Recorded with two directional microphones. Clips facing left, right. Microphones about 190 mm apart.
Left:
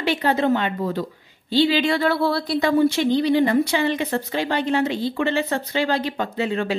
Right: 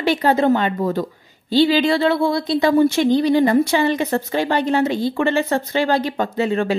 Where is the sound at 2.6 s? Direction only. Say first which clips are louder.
Right 3 dB; 45° right (ahead or behind).